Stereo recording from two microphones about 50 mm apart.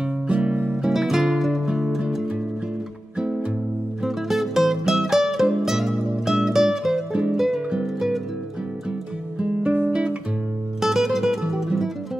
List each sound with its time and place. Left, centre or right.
0.3 s music: right
0.8 s music: centre
4.0 s music: centre
7.8 s harp: centre
9.4 s music: centre
10.8 s music: centre